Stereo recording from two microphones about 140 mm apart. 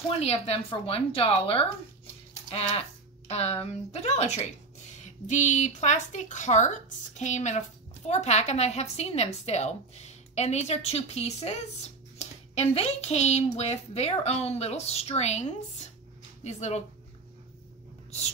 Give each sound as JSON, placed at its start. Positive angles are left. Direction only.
{"t": 0.2, "sound": "a woman's voice", "side_deg": 45}
{"t": 16.4, "sound": "speech", "side_deg": 55}